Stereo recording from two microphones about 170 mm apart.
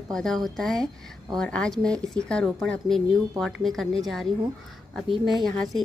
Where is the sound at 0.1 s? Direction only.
5° left (ahead or behind).